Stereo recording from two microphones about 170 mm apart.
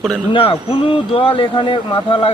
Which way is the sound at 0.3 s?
30° left (ahead or behind).